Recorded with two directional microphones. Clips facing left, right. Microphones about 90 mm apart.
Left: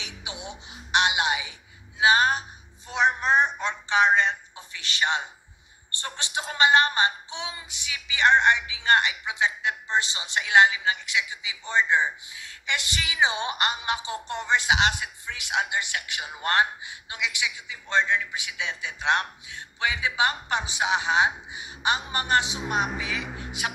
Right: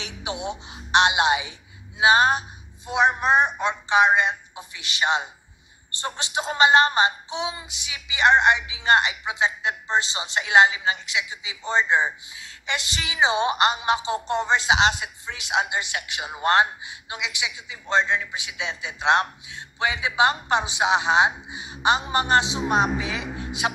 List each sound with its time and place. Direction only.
0.0 s a woman's voice: 35° right (ahead or behind)